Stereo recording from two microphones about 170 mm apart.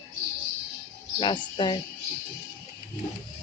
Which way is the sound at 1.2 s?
25° left (ahead or behind).